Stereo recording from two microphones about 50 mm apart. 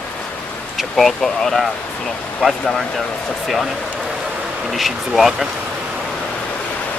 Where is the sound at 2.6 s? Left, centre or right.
Centre.